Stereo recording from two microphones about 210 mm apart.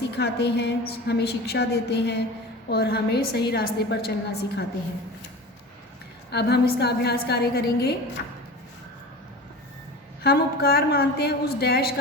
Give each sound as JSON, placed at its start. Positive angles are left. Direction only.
{"t": 0.2, "sound": "a woman's voice", "side_deg": 50}
{"t": 6.3, "sound": "a woman's voice", "side_deg": 50}
{"t": 10.2, "sound": "a woman's voice", "side_deg": 45}